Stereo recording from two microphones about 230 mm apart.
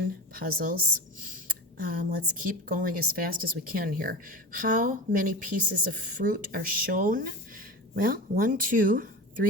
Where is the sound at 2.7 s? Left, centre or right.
Right.